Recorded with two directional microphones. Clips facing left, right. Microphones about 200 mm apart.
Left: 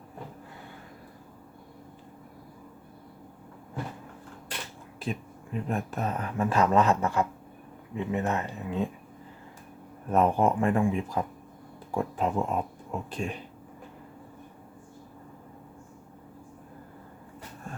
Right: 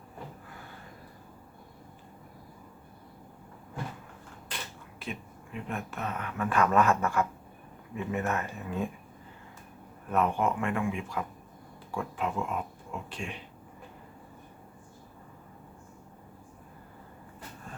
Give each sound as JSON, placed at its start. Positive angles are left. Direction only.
{"t": 5.0, "sound": "speech", "side_deg": 35}
{"t": 10.1, "sound": "speech", "side_deg": 35}